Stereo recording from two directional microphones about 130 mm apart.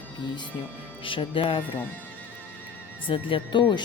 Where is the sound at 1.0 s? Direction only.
40° left (ahead or behind).